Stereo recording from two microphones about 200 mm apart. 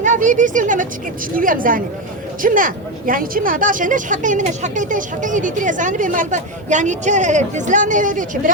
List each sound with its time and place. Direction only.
0.0 s a woman's voice: 40° right (ahead or behind)